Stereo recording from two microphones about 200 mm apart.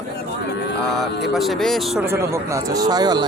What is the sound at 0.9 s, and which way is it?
Speech, centre (ahead or behind).